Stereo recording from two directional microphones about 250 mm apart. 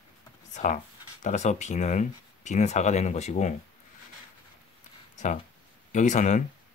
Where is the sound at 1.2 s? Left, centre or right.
Left.